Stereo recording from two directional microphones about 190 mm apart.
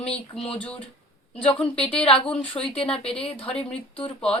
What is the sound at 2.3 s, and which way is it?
Speech, 5° left (ahead or behind).